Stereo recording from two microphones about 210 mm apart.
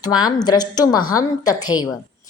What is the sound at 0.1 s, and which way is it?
Speech, 20° left (ahead or behind).